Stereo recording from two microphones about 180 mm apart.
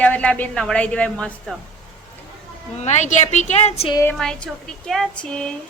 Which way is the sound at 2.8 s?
40° left (ahead or behind).